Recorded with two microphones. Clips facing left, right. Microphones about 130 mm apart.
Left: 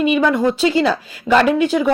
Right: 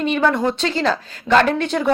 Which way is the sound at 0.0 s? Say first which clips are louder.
Left 3 dB; 10° left (ahead or behind).